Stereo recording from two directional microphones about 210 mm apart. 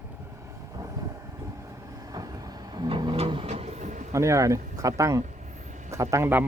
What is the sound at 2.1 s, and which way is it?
Vehicle, 15° right (ahead or behind).